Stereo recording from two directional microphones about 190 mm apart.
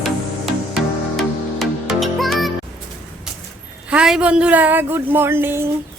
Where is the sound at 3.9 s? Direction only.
5° right (ahead or behind).